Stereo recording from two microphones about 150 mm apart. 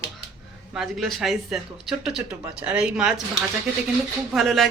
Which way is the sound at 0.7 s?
Centre (ahead or behind).